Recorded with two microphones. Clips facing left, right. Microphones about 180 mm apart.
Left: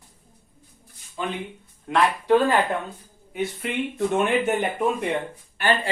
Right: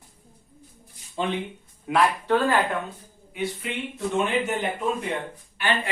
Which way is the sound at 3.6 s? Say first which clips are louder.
Left 3 dB; 55° left (ahead or behind).